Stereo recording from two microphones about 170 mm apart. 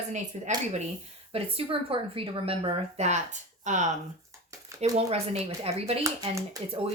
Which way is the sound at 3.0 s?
45° right (ahead or behind).